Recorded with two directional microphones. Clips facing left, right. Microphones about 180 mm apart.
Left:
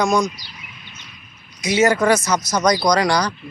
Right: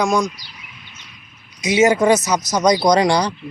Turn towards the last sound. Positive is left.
turn(degrees=-25)  # may be behind; listen again after turning